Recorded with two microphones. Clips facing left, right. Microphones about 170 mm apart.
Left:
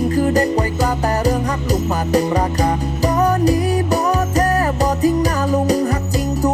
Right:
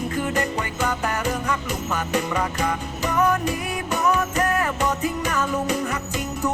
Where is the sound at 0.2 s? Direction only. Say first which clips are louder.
Left 8 dB; 35° left (ahead or behind).